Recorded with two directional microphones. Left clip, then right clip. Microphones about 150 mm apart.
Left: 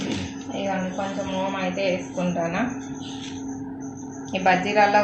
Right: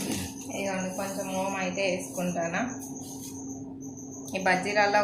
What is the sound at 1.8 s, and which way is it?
Speech, 15° left (ahead or behind).